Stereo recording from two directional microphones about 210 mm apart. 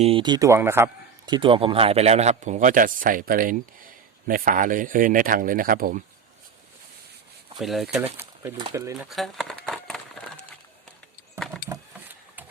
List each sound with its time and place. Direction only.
0.0 s speech: 25° right (ahead or behind); by 6.0 s 40° right (ahead or behind)
7.6 s speech: centre (ahead or behind)
9.0 s a sound: centre (ahead or behind)
11.7 s vehicle: 10° right (ahead or behind)